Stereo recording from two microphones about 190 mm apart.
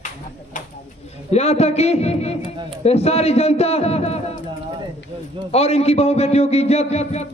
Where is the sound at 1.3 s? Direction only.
35° left (ahead or behind).